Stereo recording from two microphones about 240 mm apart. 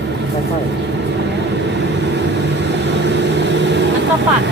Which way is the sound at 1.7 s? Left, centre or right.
Right.